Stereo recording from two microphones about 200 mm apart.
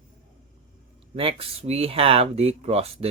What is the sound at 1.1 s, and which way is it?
Speech, 25° right (ahead or behind).